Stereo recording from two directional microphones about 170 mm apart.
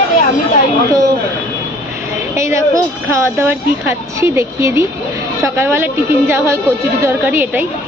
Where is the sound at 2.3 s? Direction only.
15° right (ahead or behind).